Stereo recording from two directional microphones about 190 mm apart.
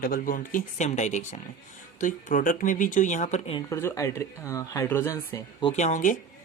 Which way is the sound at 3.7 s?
15° left (ahead or behind).